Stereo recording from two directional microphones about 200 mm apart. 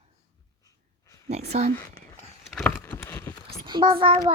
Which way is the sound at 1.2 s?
35° right (ahead or behind).